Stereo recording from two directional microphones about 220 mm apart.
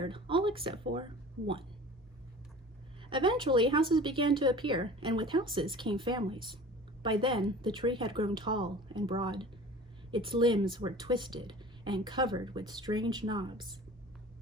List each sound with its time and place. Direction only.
0.0 s speech: 20° right (ahead or behind)
3.0 s speech: 20° right (ahead or behind)